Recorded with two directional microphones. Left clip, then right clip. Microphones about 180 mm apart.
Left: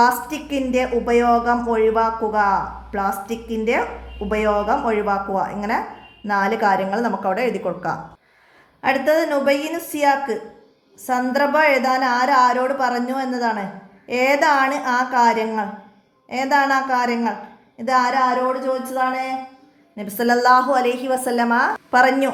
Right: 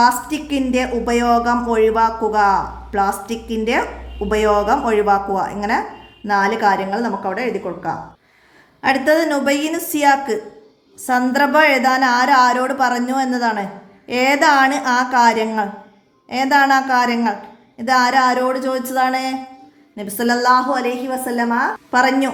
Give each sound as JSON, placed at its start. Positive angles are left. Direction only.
{"t": 0.0, "sound": "a woman's voice", "side_deg": -5}
{"t": 8.8, "sound": "a woman's voice", "side_deg": -10}
{"t": 20.0, "sound": "a woman's voice", "side_deg": -5}